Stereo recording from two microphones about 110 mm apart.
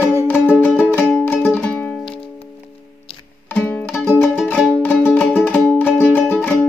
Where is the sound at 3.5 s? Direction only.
15° left (ahead or behind).